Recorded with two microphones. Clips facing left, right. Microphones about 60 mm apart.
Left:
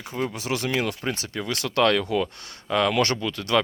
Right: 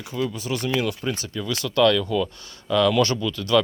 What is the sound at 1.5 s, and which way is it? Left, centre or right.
Speech, left.